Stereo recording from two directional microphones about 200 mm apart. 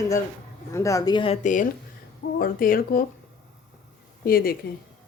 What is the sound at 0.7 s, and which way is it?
Speech, 15° left (ahead or behind).